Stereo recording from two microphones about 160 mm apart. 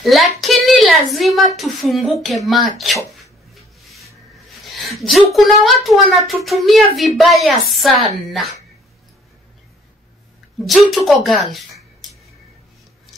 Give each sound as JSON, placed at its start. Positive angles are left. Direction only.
{"t": 0.0, "sound": "speech", "side_deg": 0}
{"t": 0.4, "sound": "a sound", "side_deg": 0}
{"t": 1.6, "sound": "speech", "side_deg": 0}
{"t": 3.1, "sound": "a sound", "side_deg": 0}
{"t": 4.8, "sound": "speech", "side_deg": 0}
{"t": 10.9, "sound": "speech", "side_deg": 0}